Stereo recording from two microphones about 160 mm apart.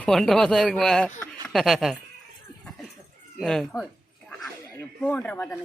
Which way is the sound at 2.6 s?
Centre (ahead or behind).